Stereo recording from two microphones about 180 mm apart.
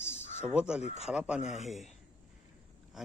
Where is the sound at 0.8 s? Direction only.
35° left (ahead or behind).